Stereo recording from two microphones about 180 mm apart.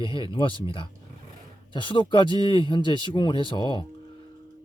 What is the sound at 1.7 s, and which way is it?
Speech, 25° left (ahead or behind).